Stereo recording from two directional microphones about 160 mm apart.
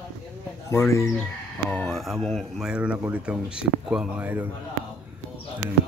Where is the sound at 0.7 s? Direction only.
20° left (ahead or behind).